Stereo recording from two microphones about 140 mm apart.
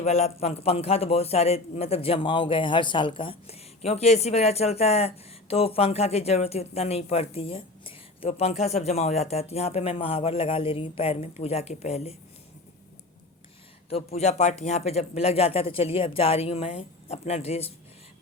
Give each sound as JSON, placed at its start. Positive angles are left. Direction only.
{"t": 0.0, "sound": "a man's voice", "side_deg": 50}
{"t": 13.9, "sound": "a man's voice", "side_deg": 50}